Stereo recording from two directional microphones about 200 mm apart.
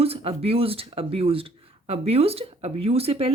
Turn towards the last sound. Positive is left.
turn(degrees=-30)  # may be behind; listen again after turning